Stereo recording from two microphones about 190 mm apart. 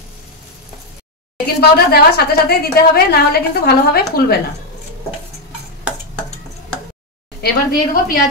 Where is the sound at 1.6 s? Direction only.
55° left (ahead or behind).